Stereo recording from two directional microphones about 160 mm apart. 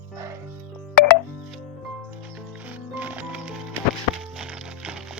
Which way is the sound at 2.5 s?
10° right (ahead or behind).